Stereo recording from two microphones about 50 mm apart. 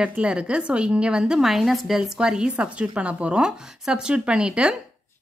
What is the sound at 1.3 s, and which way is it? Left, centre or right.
Speech, centre.